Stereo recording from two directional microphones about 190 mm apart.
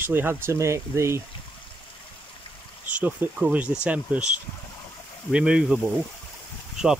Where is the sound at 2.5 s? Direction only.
30° left (ahead or behind).